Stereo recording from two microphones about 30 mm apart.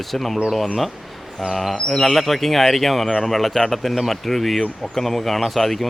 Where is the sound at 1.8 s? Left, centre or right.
Left.